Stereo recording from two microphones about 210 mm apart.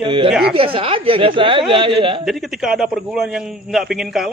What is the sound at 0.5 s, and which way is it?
Speech, 25° right (ahead or behind).